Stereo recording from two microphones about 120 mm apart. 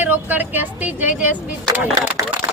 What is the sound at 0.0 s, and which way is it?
Speech, 15° right (ahead or behind).